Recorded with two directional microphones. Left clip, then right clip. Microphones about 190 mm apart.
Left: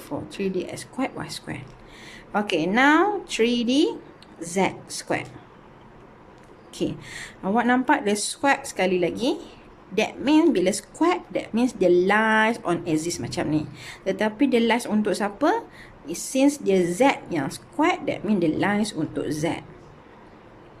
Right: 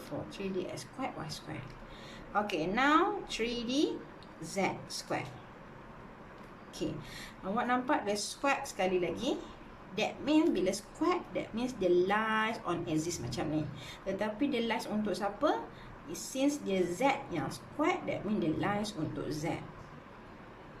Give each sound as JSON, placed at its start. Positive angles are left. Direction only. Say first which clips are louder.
{"t": 0.3, "sound": "a woman's voice", "louder": "left 11 dB", "side_deg": 45}
{"t": 6.7, "sound": "a woman's voice", "louder": "left 10 dB", "side_deg": 50}